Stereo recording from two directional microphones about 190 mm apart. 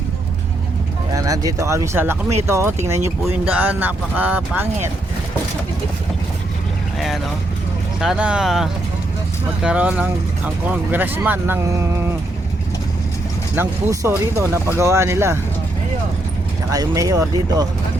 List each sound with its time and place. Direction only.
1.1 s speech: 20° right (ahead or behind)
8.0 s speech: 5° right (ahead or behind)
13.6 s speech: 15° right (ahead or behind)
16.7 s speech: 20° right (ahead or behind)